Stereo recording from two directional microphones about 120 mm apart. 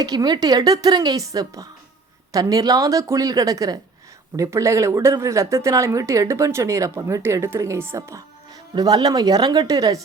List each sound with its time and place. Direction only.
0.0 s speech: 35° right (ahead or behind)
8.7 s speech: 35° right (ahead or behind)